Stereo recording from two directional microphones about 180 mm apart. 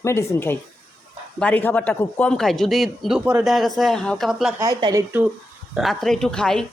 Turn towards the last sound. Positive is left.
turn(degrees=5)  # may be behind; listen again after turning